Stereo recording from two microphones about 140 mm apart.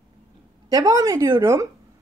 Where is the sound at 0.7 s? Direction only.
25° right (ahead or behind).